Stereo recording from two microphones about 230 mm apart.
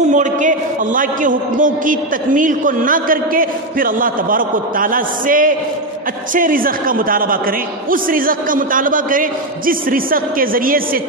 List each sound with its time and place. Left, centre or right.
0.1 s a man's voice: right